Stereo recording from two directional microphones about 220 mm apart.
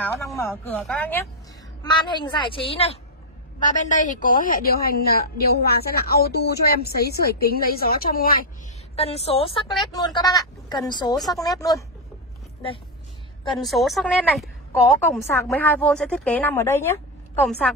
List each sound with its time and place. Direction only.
0.2 s a woman's voice: 10° left (ahead or behind)
1.8 s a woman's voice: 20° left (ahead or behind); by 8.4 s 40° left (ahead or behind)
8.9 s a woman's voice: 25° left (ahead or behind)
13.6 s a woman's voice: centre (ahead or behind)